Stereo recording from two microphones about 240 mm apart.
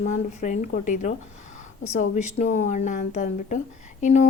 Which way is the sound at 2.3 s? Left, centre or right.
Left.